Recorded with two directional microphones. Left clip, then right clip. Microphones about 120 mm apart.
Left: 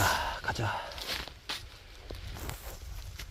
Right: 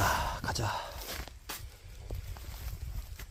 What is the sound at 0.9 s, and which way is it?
Walk, 5° right (ahead or behind).